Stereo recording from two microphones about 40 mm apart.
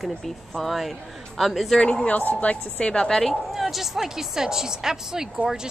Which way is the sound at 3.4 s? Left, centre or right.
Centre.